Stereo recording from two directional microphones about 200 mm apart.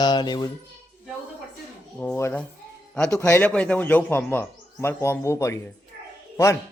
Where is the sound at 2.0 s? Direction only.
10° left (ahead or behind).